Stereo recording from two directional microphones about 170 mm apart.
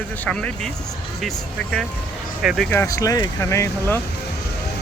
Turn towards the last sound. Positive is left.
turn(degrees=15)  # may be behind; listen again after turning